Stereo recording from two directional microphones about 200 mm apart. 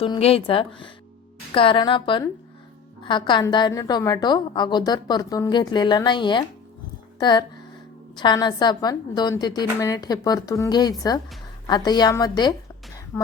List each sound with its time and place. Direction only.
0.0 s a woman's voice: 30° left (ahead or behind)